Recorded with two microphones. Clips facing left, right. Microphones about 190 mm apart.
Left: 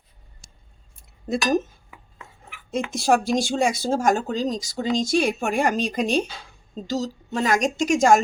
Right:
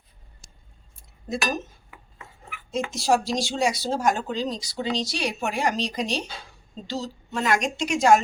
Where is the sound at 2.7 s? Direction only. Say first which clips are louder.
Left 2 dB; 55° left (ahead or behind).